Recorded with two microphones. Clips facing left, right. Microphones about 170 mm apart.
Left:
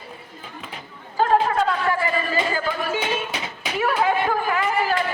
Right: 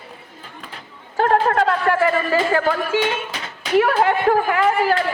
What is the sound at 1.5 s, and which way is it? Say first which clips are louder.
A man's voice: right 4 dB; 75° right (ahead or behind).